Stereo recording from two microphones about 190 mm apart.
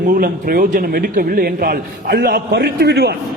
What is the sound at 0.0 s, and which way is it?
Speech, 50° right (ahead or behind).